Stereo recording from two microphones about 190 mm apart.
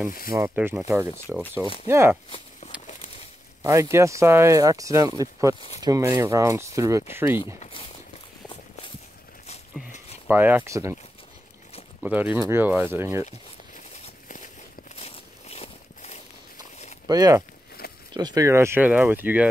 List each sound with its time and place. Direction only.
0.6 s speech: 10° right (ahead or behind)
2.2 s walk: 30° left (ahead or behind)
3.6 s speech: 15° right (ahead or behind)
7.6 s speech: 30° left (ahead or behind)
10.2 s speech: 10° right (ahead or behind)
12.0 s speech: 10° right (ahead or behind)
15.0 s a sound: 35° left (ahead or behind)
17.1 s speech: 20° right (ahead or behind)
17.8 s a sound: 50° left (ahead or behind)
18.1 s speech: 20° right (ahead or behind)